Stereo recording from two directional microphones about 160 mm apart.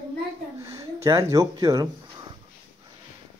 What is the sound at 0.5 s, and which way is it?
Speech, 20° right (ahead or behind).